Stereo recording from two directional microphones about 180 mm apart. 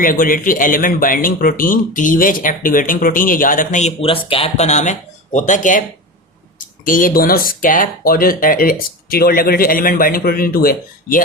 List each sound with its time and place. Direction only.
0.0 s speech: 50° left (ahead or behind)
6.8 s speech: 50° left (ahead or behind)